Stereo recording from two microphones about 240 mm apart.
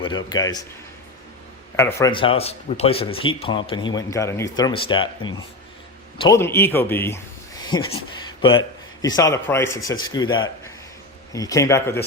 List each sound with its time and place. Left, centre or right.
0.3 s speech: centre
1.7 s a man's voice: centre
8.2 s a sound: centre
9.0 s speech: centre